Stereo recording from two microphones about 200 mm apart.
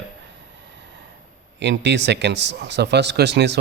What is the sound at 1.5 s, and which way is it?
Speech, 60° right (ahead or behind).